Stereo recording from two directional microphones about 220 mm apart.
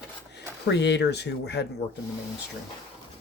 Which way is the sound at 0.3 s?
50° left (ahead or behind).